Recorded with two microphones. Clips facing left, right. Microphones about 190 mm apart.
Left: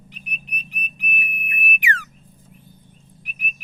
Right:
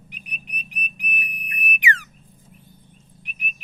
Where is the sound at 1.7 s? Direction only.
20° right (ahead or behind).